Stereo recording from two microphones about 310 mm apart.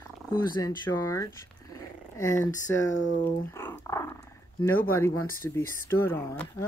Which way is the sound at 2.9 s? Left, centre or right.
Left.